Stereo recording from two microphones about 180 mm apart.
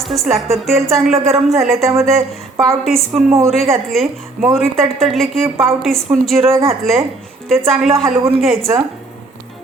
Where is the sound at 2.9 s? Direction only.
Centre (ahead or behind).